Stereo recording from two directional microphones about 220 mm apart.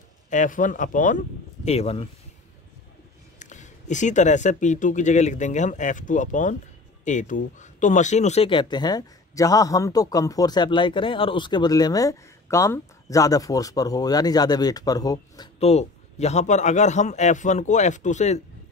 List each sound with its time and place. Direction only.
0.3 s speech: 35° left (ahead or behind)
3.3 s speech: 35° left (ahead or behind)